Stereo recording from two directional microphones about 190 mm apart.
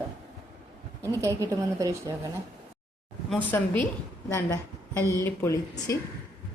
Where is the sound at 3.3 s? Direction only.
10° left (ahead or behind).